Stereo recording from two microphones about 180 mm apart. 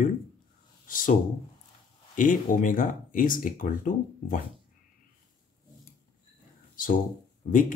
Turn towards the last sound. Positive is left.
turn(degrees=45)  # may be behind; listen again after turning